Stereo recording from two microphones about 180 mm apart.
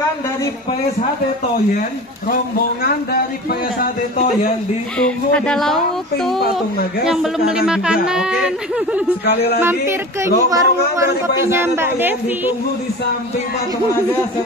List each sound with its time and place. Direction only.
4.9 s speech: 5° left (ahead or behind)
7.1 s a man's voice: 5° right (ahead or behind)